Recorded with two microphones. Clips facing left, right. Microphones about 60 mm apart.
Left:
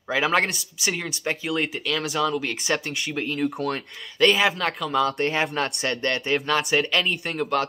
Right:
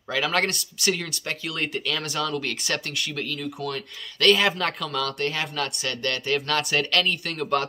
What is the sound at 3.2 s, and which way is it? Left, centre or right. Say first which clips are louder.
Speech: left 5 dB; left.